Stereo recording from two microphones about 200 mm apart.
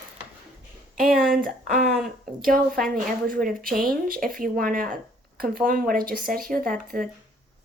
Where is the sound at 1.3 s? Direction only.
45° right (ahead or behind).